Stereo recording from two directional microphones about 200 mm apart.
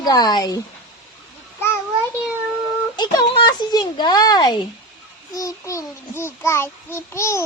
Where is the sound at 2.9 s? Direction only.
20° left (ahead or behind).